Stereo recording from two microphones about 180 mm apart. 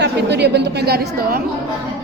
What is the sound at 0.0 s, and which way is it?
A woman's voice, 70° right (ahead or behind).